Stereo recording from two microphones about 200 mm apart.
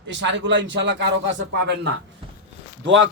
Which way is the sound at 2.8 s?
70° right (ahead or behind).